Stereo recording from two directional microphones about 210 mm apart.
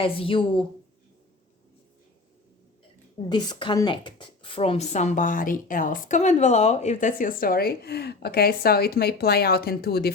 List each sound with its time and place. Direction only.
0.0 s a woman's voice: 25° left (ahead or behind)
3.2 s speech: 20° left (ahead or behind); by 10.1 s 50° left (ahead or behind)